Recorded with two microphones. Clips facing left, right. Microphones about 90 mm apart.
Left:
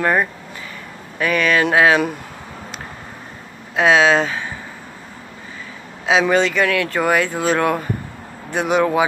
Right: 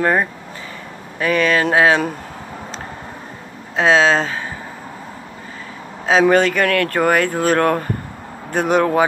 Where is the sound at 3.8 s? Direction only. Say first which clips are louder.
Even; 30° right (ahead or behind).